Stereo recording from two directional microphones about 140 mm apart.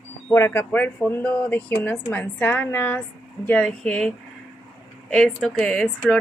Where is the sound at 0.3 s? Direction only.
15° left (ahead or behind).